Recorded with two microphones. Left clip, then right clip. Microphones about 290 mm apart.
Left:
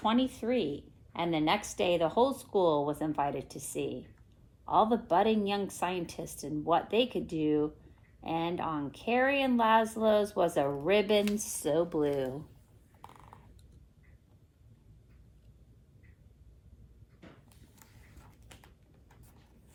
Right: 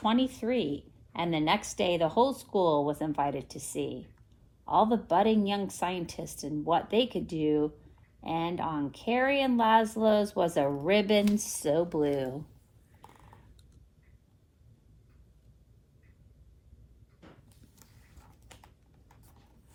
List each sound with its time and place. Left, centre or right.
0.0 s speech: right
18.4 s typing: centre